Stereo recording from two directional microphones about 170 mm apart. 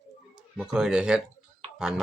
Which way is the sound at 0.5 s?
5° right (ahead or behind).